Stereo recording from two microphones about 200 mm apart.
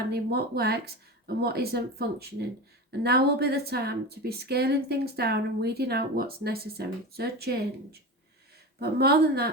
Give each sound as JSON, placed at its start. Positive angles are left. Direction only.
{"t": 0.1, "sound": "a woman's voice", "side_deg": -50}
{"t": 8.8, "sound": "a woman's voice", "side_deg": -50}